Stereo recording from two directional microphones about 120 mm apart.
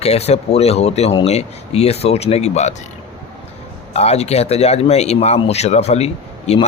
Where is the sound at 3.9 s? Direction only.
60° left (ahead or behind).